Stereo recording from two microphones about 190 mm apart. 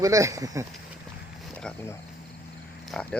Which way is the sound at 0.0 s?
15° right (ahead or behind).